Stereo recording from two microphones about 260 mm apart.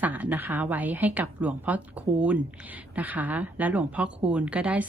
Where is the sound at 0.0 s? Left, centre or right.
Centre.